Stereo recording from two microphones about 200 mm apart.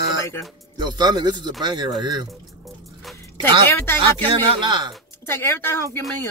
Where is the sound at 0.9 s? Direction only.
20° right (ahead or behind).